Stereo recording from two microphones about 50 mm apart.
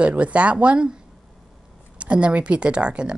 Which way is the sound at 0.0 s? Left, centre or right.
Right.